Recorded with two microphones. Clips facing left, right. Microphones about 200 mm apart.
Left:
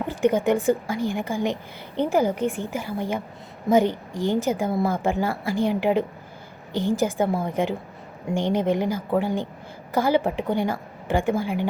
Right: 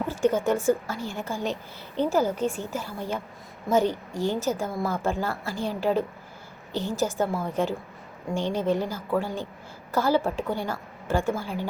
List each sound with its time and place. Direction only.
0.3 s a woman's voice: 15° left (ahead or behind)